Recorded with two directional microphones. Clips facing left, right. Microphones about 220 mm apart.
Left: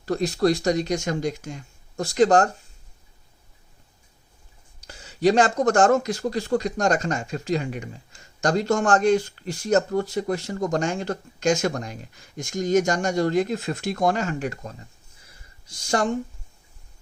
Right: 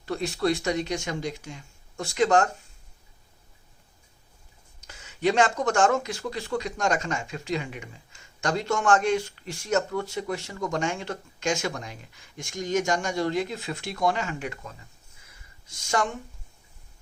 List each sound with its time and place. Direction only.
0.0 s speech: 40° left (ahead or behind)
4.8 s speech: 35° left (ahead or behind)
15.3 s a sound: 35° left (ahead or behind)